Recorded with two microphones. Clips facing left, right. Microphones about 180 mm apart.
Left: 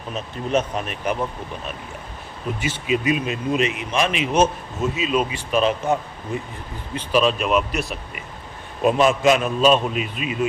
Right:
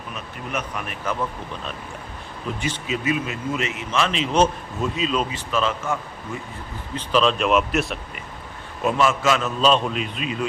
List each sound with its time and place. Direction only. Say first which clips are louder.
0.1 s speech: left 8 dB; 25° left (ahead or behind)
2.6 s a man's voice: left 5 dB; 10° left (ahead or behind)
8.8 s a man's voice: left 4 dB; 20° left (ahead or behind)